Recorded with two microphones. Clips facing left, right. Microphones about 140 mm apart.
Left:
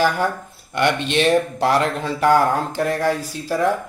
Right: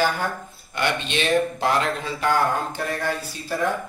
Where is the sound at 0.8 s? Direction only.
65° left (ahead or behind).